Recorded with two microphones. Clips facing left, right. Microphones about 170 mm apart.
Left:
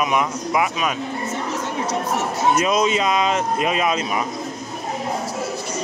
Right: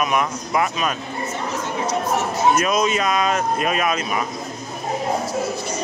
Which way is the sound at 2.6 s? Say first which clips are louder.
Left 1 dB; 25° left (ahead or behind).